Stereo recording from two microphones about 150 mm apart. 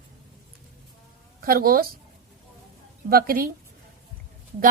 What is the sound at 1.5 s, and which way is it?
Speech, 75° right (ahead or behind).